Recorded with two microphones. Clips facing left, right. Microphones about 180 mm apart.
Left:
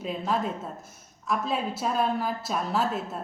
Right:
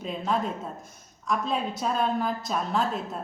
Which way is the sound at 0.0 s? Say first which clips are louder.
Even; centre (ahead or behind).